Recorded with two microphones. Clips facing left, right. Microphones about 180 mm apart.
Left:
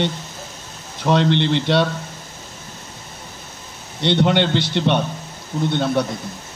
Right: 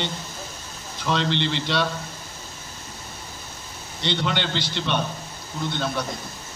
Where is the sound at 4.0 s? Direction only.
60° left (ahead or behind).